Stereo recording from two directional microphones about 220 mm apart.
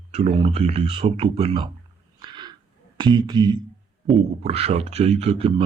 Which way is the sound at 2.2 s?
20° right (ahead or behind).